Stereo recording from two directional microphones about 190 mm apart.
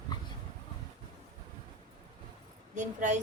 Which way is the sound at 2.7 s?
40° right (ahead or behind).